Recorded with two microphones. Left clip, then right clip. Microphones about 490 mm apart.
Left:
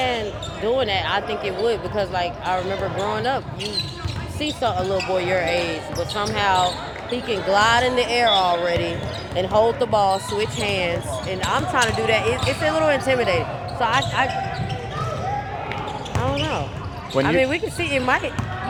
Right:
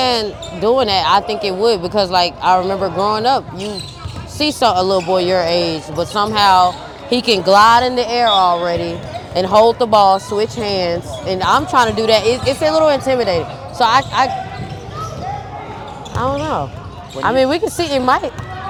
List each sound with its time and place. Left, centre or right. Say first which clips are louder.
0.0 s speech: right 7 dB; right
7.1 s speech: right 9 dB; right
12.6 s speech: right 6 dB; right
16.2 s speech: right 7 dB; right
17.3 s speech: right 6 dB; right